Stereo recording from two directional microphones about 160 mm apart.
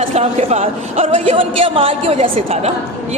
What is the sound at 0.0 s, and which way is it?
A woman's voice, 40° right (ahead or behind).